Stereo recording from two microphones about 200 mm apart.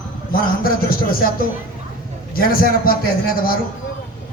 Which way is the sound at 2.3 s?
45° left (ahead or behind).